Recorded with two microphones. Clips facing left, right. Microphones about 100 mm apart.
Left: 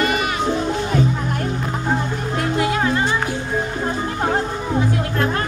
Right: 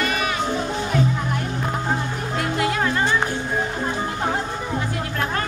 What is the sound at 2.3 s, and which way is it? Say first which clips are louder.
Music: left 2 dB; 5° left (ahead or behind).